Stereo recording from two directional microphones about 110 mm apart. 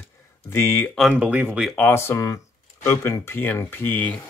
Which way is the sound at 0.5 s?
25° left (ahead or behind).